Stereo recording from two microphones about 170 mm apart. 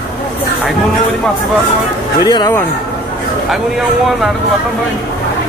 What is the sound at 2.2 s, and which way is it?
Speech, 25° left (ahead or behind).